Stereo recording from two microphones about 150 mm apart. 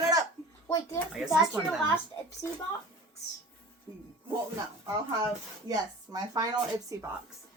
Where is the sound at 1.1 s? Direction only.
Centre (ahead or behind).